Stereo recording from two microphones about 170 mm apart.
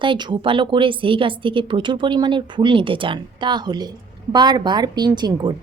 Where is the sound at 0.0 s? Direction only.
30° right (ahead or behind).